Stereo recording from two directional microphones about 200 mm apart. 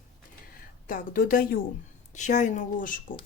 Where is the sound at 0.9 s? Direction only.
45° left (ahead or behind).